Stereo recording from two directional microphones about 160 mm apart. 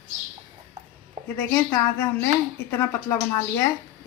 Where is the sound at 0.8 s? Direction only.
45° right (ahead or behind).